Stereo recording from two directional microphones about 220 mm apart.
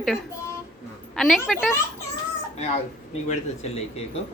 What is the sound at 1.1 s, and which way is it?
Speech, centre (ahead or behind).